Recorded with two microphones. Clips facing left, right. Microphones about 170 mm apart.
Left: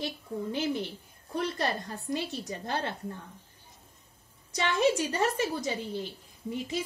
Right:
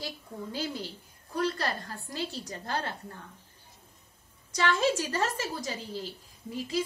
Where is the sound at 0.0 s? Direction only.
20° left (ahead or behind).